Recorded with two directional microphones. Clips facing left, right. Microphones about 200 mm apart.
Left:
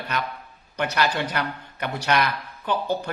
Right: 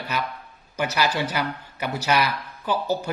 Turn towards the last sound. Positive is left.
turn(degrees=-5)  # may be behind; listen again after turning